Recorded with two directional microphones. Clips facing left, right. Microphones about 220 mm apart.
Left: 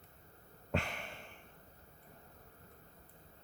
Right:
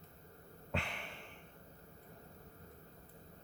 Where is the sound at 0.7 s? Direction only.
45° left (ahead or behind).